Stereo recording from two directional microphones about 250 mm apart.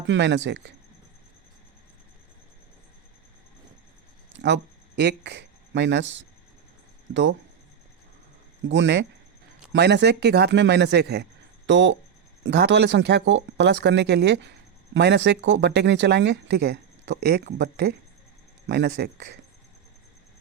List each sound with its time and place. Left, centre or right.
0.1 s speech: right
4.3 s a sound: right
7.1 s speech: right
8.6 s speech: right